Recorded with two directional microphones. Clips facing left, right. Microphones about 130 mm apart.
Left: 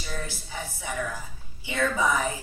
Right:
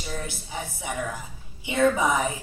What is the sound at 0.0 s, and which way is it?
A woman's voice, 20° right (ahead or behind).